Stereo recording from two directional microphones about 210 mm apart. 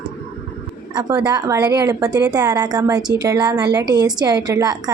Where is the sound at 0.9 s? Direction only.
20° right (ahead or behind).